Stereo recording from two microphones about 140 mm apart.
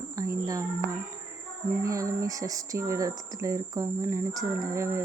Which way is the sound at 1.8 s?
25° right (ahead or behind).